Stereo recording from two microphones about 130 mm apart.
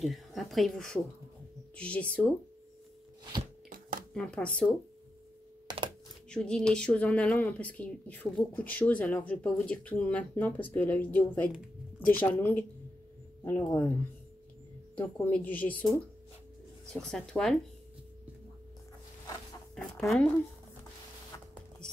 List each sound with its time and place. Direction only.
0.0 s a woman's voice: centre (ahead or behind)
4.1 s speech: 10° left (ahead or behind)
5.7 s a sound: 30° right (ahead or behind)
6.3 s speech: 5° left (ahead or behind)
15.0 s speech: 10° left (ahead or behind)
16.9 s a woman's voice: 5° left (ahead or behind)
20.1 s a woman's voice: 5° left (ahead or behind)